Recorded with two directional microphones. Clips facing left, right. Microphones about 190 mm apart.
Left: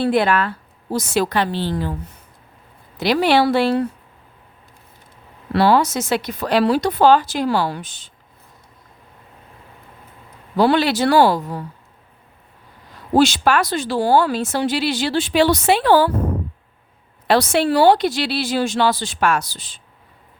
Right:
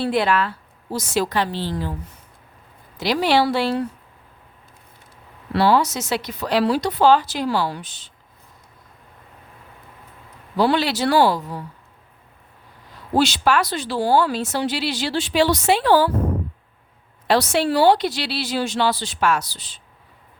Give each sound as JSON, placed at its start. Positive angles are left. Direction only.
{"t": 0.0, "sound": "a woman's voice", "side_deg": 50}
{"t": 3.0, "sound": "a woman's voice", "side_deg": 60}
{"t": 5.5, "sound": "speech", "side_deg": 55}
{"t": 10.6, "sound": "speech", "side_deg": 55}
{"t": 13.1, "sound": "speech", "side_deg": 50}
{"t": 17.2, "sound": "speech", "side_deg": 55}